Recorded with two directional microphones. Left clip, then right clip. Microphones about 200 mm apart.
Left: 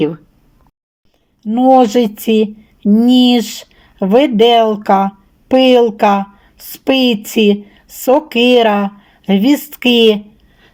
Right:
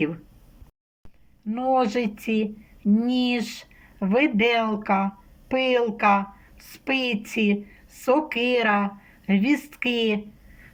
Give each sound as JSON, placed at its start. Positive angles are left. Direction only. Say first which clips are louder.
{"t": 1.5, "sound": "speech", "louder": "left 13 dB", "side_deg": 45}